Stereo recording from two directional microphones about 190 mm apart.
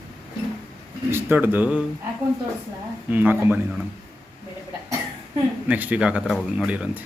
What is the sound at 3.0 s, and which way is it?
Speech, 10° right (ahead or behind).